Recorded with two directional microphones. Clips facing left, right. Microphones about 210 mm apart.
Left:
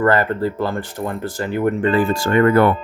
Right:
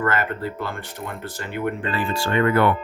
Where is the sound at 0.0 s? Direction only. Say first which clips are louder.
Left 7 dB; 35° left (ahead or behind).